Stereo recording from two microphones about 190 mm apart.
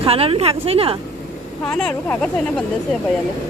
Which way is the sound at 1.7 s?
5° left (ahead or behind).